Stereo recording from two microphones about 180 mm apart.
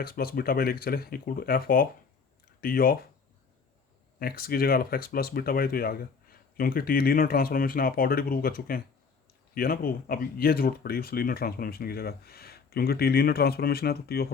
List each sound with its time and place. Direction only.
0.0 s speech: 55° left (ahead or behind)
4.2 s speech: 55° left (ahead or behind)